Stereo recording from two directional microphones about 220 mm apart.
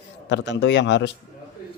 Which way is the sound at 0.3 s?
55° left (ahead or behind).